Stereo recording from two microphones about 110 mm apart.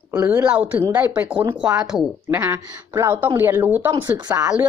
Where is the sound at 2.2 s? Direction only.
20° right (ahead or behind).